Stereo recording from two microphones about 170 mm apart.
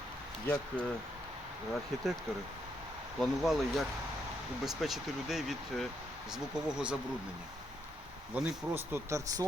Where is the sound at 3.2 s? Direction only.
Centre (ahead or behind).